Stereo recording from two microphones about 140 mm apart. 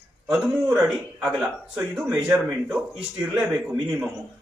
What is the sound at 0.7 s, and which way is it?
A man's voice, centre (ahead or behind).